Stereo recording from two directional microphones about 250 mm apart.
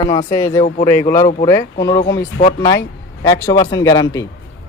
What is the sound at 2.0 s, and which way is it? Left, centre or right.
Speech, left.